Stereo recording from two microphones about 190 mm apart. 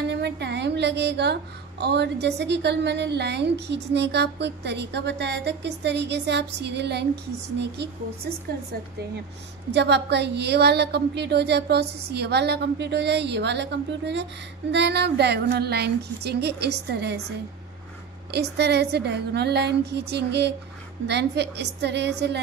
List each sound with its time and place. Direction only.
0.1 s a woman's voice: 65° right (ahead or behind)
9.7 s a woman's voice: 65° right (ahead or behind)
18.3 s a woman's voice: 60° right (ahead or behind)